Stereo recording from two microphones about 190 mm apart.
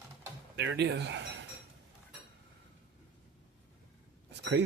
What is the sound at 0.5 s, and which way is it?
Speech, 65° right (ahead or behind).